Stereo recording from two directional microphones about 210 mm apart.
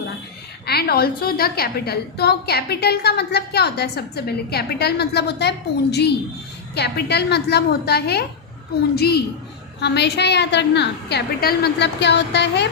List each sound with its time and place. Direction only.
0.6 s a woman's voice: 50° left (ahead or behind)